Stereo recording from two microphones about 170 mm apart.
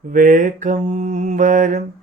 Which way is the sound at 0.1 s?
50° right (ahead or behind).